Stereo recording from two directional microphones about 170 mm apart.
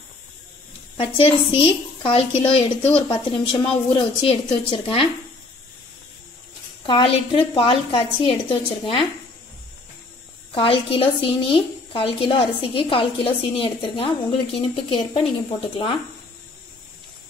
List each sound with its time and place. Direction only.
0.9 s a woman's voice: 30° left (ahead or behind)
6.9 s a woman's voice: 30° left (ahead or behind)
10.5 s a woman's voice: 30° left (ahead or behind)